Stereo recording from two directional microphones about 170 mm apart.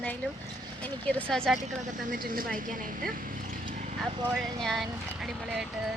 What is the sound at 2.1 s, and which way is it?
Speech, 55° right (ahead or behind).